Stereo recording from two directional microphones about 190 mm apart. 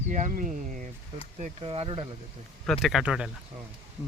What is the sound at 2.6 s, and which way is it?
Speech, centre (ahead or behind).